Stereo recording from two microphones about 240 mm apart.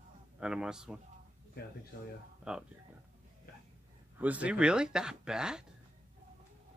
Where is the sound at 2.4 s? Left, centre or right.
Centre.